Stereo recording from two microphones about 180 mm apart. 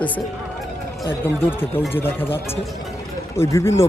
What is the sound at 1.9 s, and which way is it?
Speech, 10° left (ahead or behind).